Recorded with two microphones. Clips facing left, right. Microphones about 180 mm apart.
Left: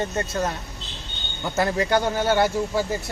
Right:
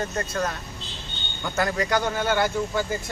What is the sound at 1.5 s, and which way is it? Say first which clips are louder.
A man's voice: left 3 dB; 25° left (ahead or behind).